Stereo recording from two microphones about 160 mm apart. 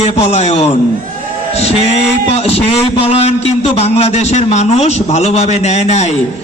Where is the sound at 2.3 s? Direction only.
40° left (ahead or behind).